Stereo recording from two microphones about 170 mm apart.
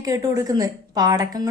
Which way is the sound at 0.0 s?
20° right (ahead or behind).